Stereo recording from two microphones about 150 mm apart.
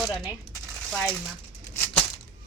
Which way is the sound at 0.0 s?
Centre (ahead or behind).